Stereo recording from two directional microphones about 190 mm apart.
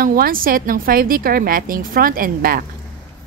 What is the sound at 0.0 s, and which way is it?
Speech, 50° right (ahead or behind).